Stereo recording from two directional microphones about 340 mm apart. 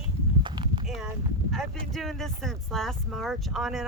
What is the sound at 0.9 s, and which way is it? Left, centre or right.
Speech, centre.